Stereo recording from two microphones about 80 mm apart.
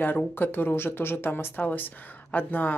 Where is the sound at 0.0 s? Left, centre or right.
Left.